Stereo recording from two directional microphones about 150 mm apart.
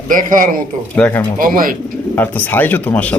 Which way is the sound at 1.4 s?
70° right (ahead or behind).